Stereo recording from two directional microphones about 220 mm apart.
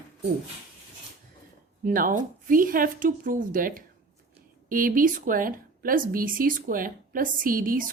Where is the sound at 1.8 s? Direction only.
40° right (ahead or behind).